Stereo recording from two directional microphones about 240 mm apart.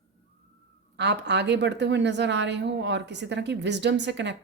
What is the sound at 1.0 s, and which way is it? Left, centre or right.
A woman's voice, right.